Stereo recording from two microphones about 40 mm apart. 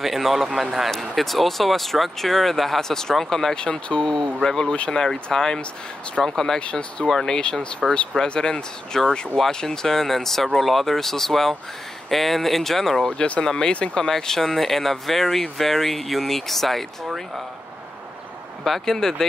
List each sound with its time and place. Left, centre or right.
0.0 s speech: centre
3.5 s speech: left
6.6 s speech: left
7.1 s speech: centre
7.3 s speech: centre
13.5 s speech: centre
13.7 s speech: left
14.0 s speech: centre
18.6 s speech: centre